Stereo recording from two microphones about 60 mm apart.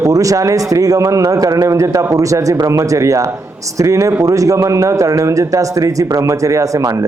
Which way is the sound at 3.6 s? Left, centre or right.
Right.